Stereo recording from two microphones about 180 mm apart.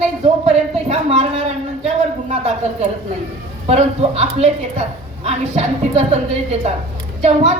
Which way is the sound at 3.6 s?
35° right (ahead or behind).